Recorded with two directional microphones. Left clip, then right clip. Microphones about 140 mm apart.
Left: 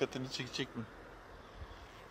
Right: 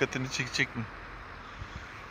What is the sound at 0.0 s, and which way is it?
Speech, 15° right (ahead or behind).